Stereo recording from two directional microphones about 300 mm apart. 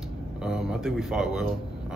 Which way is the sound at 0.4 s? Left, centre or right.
Centre.